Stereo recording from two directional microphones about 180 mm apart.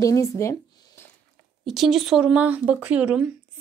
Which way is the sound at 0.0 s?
15° left (ahead or behind).